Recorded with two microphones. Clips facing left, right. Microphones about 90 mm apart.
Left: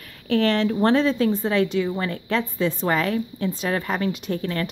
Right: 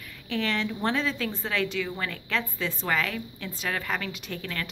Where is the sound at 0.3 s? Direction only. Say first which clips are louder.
Left 9 dB; 45° left (ahead or behind).